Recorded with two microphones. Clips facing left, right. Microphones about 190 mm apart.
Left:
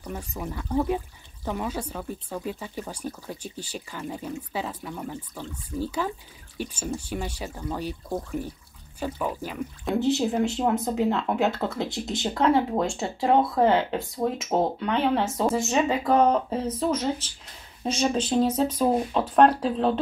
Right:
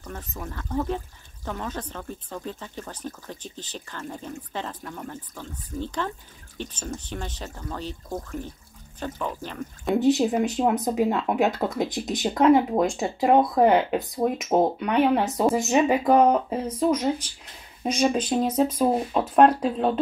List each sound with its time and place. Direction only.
0.0 s speech: 10° left (ahead or behind)
9.9 s speech: 20° right (ahead or behind)